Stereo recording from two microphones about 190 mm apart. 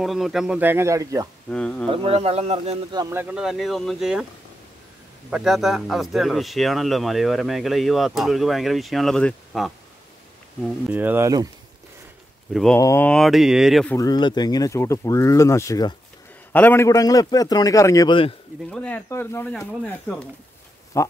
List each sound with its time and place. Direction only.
0.0 s speech: centre (ahead or behind)
1.5 s speech: 5° left (ahead or behind)
1.9 s speech: 30° right (ahead or behind)
2.9 s speech: 15° right (ahead or behind)
5.3 s speech: centre (ahead or behind)
12.7 s speech: 15° left (ahead or behind)
13.9 s a man's voice: 20° left (ahead or behind)
18.7 s speech: 5° left (ahead or behind)